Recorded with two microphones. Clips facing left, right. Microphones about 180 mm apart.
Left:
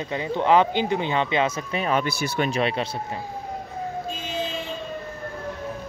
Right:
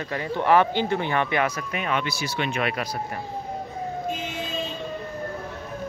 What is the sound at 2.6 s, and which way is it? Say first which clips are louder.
Speech: left 2 dB; 30° left (ahead or behind).